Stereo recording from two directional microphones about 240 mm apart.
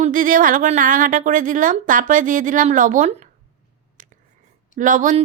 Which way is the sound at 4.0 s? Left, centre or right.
Right.